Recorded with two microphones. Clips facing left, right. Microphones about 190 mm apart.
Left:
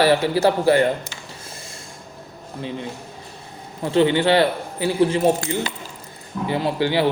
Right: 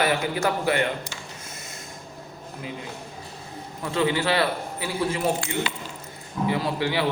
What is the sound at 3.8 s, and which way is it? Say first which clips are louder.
A man's voice: left 7 dB; 30° left (ahead or behind).